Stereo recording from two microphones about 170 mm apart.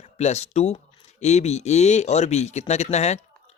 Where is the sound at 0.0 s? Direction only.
40° left (ahead or behind).